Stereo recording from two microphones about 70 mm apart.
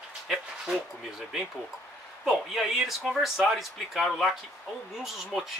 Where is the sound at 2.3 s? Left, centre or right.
Centre.